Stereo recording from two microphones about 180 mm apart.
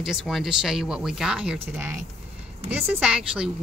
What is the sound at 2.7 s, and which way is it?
Speech, 5° right (ahead or behind).